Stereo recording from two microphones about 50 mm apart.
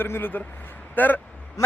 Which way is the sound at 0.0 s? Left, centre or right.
Left.